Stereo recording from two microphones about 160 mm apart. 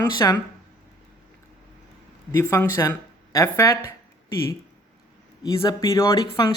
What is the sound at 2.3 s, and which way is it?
Speech, 15° left (ahead or behind).